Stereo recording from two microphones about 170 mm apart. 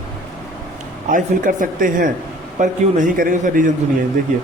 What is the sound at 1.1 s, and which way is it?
A man's voice, 55° right (ahead or behind).